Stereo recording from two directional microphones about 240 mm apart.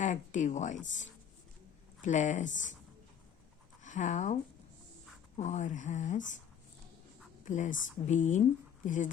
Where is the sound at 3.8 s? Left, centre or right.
Left.